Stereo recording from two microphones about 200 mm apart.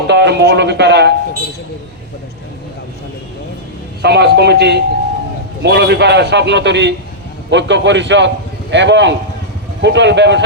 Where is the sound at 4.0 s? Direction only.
55° right (ahead or behind).